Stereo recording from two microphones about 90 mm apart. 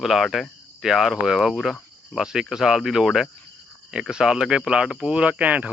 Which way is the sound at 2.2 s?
5° right (ahead or behind).